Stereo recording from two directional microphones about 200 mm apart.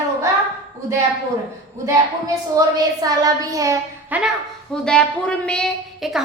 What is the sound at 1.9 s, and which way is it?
A woman's voice, 15° right (ahead or behind).